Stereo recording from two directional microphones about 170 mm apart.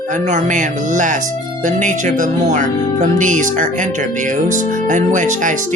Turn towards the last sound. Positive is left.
turn(degrees=-50)  # may be behind; listen again after turning